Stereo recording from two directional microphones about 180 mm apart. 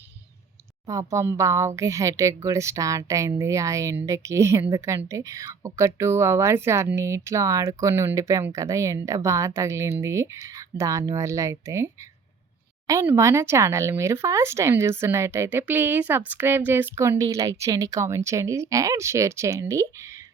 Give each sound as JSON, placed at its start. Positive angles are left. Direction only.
{"t": 0.9, "sound": "speech", "side_deg": -15}
{"t": 12.9, "sound": "speech", "side_deg": -15}